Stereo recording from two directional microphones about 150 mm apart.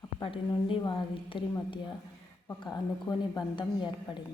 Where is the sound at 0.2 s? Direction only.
35° left (ahead or behind).